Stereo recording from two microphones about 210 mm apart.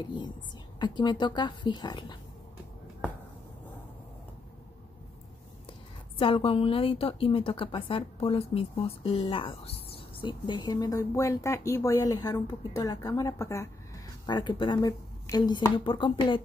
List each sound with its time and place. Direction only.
0.7 s a woman's voice: 20° left (ahead or behind)
5.7 s a woman's voice: 25° left (ahead or behind)